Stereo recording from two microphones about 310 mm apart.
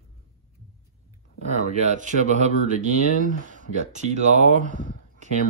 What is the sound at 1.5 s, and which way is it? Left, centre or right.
Speech, right.